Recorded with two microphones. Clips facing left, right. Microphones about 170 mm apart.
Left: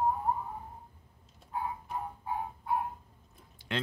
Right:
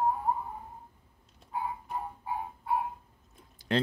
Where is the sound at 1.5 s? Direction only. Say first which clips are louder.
Right 1 dB; 5° right (ahead or behind).